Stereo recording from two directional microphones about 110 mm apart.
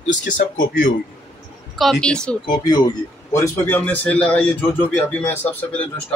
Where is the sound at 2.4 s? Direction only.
40° left (ahead or behind).